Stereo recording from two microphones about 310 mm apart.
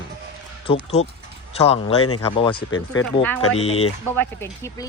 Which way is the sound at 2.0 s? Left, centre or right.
Left.